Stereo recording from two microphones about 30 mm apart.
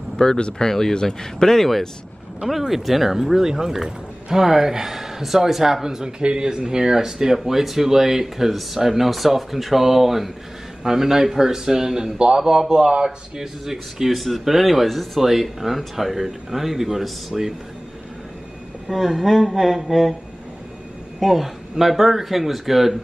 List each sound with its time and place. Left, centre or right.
0.2 s speech: centre
2.4 s speech: centre
6.1 s a man's voice: right; by 14.1 s centre
14.1 s speech: centre
18.9 s speech: centre
21.2 s speech: centre